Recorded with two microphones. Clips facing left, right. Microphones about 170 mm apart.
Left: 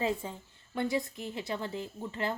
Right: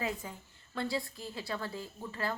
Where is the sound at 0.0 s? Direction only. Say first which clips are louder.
Left 5 dB; 25° left (ahead or behind).